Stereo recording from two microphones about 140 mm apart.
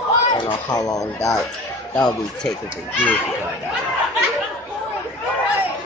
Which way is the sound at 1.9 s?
5° left (ahead or behind).